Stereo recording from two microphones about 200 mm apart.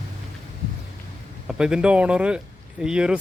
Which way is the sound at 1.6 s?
5° right (ahead or behind).